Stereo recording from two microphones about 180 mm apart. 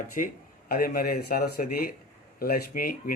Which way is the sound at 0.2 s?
45° left (ahead or behind).